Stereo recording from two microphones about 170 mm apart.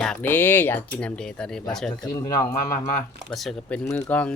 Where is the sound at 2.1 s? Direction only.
25° left (ahead or behind).